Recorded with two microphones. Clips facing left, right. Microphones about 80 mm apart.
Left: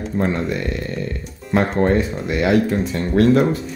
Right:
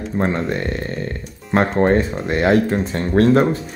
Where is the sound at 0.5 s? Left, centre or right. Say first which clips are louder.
Right 1 dB; right.